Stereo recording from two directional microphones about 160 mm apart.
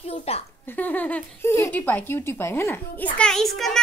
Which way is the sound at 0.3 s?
40° left (ahead or behind).